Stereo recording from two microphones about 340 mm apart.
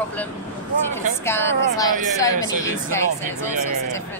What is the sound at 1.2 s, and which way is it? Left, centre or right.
Speech, centre.